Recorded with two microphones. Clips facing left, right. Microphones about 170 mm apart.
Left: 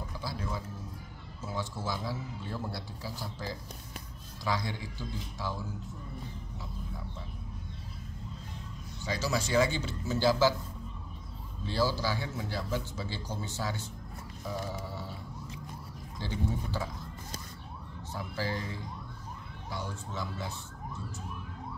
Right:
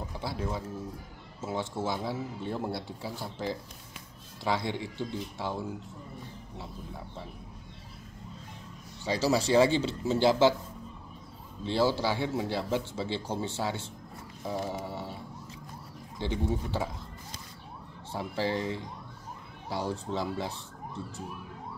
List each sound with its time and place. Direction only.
0.2 s a man's voice: 25° right (ahead or behind)
9.0 s speech: 30° right (ahead or behind)
11.6 s a man's voice: 25° right (ahead or behind)
14.4 s music: 25° right (ahead or behind)
16.2 s a man's voice: 20° right (ahead or behind)
18.1 s a man's voice: 25° right (ahead or behind)